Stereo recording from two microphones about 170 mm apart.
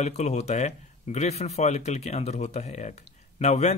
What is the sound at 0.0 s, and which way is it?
Speech, 40° left (ahead or behind).